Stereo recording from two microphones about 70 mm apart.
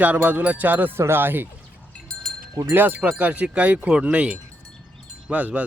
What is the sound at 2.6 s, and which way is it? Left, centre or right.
Wind chime, right.